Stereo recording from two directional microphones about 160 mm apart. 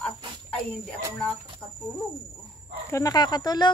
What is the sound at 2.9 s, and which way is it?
Speech, 25° left (ahead or behind).